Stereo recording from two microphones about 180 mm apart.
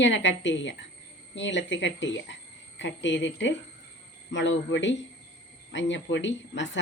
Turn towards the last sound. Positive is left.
turn(degrees=90)